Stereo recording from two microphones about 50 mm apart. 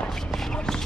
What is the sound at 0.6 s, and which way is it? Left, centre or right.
Clip-clop, centre.